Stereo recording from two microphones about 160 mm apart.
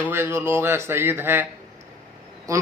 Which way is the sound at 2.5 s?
20° right (ahead or behind).